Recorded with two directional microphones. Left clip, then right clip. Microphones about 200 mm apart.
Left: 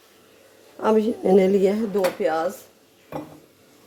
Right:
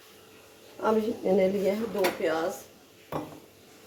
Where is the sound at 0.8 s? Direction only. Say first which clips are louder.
Left 6 dB; 55° left (ahead or behind).